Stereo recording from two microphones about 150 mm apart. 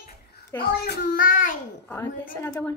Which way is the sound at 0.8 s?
80° left.